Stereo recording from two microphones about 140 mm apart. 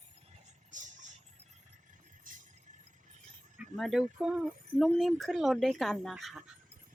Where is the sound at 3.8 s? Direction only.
Centre (ahead or behind).